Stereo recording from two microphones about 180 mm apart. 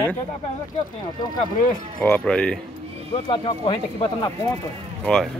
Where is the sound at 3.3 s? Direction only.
25° left (ahead or behind).